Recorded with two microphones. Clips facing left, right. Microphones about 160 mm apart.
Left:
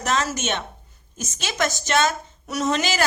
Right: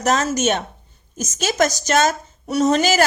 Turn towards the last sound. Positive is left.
turn(degrees=-40)  # may be behind; listen again after turning